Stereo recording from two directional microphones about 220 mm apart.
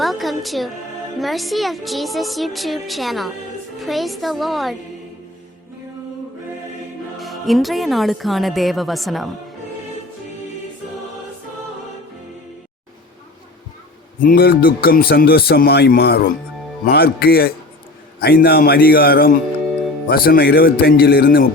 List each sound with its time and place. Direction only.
0.0 s music: centre (ahead or behind)
1.2 s a woman's voice: centre (ahead or behind)
7.2 s a woman's voice: centre (ahead or behind)
14.2 s speech: 40° left (ahead or behind)